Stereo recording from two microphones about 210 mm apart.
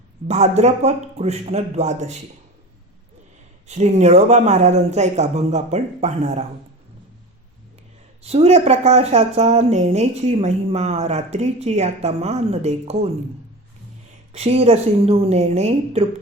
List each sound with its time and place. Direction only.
0.3 s speech: 30° right (ahead or behind)
3.7 s speech: 30° right (ahead or behind)
8.2 s speech: 30° right (ahead or behind)
14.3 s a woman's voice: 30° right (ahead or behind)